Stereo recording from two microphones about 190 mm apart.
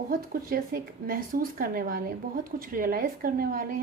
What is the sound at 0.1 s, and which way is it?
Speech, 50° right (ahead or behind).